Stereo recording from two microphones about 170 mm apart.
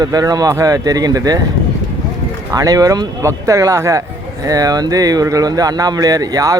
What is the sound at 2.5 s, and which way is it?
Speech, 20° right (ahead or behind).